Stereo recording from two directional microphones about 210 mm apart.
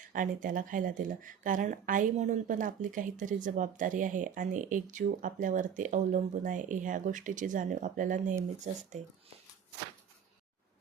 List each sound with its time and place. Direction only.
0.0 s speech: 40° right (ahead or behind)